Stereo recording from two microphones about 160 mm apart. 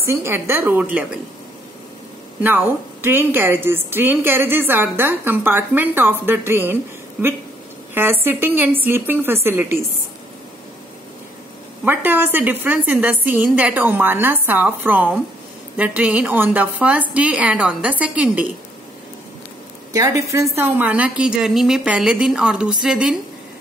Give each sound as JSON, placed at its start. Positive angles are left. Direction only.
{"t": 0.0, "sound": "a woman's voice", "side_deg": -15}
{"t": 2.4, "sound": "a woman's voice", "side_deg": -15}
{"t": 11.8, "sound": "a woman's voice", "side_deg": -10}
{"t": 19.9, "sound": "a woman's voice", "side_deg": -20}